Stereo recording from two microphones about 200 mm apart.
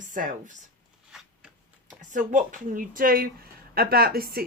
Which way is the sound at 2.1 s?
40° right (ahead or behind).